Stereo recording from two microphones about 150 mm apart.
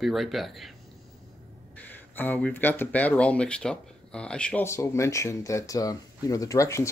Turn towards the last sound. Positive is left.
turn(degrees=20)  # may be behind; listen again after turning